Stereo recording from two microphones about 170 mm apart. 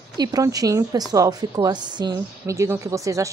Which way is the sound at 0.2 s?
20° right (ahead or behind).